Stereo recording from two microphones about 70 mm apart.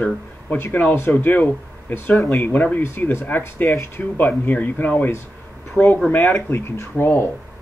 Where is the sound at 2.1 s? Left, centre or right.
Centre.